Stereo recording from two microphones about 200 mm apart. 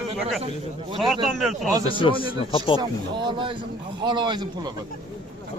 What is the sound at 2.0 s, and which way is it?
Speech, 25° left (ahead or behind).